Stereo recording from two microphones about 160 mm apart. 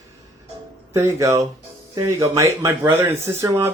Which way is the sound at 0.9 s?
20° right (ahead or behind).